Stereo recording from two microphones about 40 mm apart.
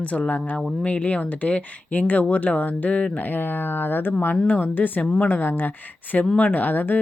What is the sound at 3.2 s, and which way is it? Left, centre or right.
Speech, left.